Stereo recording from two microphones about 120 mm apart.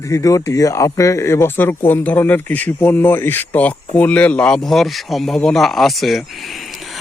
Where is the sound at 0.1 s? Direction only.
25° left (ahead or behind).